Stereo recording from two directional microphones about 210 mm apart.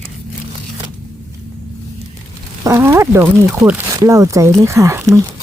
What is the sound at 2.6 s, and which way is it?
Speech, 15° right (ahead or behind).